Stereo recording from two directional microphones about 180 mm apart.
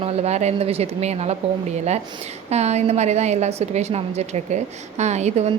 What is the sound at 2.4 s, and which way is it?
A woman's voice, 35° right (ahead or behind).